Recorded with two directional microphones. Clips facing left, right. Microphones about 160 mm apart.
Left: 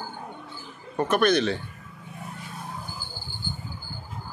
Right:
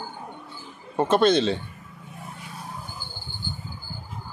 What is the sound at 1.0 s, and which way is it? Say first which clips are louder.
Speech: right 2 dB; 25° right (ahead or behind).